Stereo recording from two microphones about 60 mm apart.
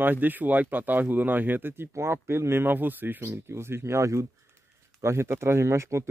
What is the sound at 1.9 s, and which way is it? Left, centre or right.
Speech, right.